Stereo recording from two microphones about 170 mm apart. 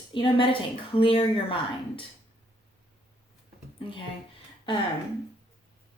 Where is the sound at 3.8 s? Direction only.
30° left (ahead or behind).